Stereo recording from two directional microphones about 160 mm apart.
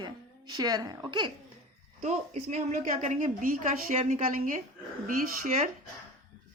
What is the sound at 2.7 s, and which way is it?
A woman's voice, 55° right (ahead or behind).